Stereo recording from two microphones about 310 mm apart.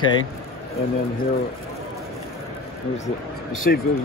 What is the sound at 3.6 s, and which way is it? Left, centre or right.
Speech, left.